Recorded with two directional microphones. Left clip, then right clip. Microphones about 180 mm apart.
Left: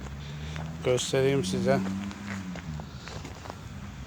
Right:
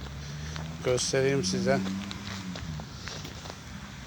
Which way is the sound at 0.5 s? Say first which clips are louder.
Left 1 dB; 10° left (ahead or behind).